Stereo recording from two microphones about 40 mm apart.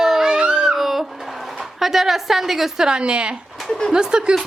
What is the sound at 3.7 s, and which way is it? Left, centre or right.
Speech, centre.